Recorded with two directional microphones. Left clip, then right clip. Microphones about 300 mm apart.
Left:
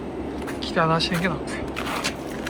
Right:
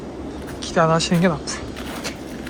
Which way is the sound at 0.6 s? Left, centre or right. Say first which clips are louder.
Right 4 dB; centre.